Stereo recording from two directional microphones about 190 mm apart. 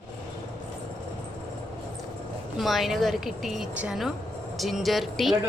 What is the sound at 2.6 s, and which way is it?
A woman's voice, centre (ahead or behind).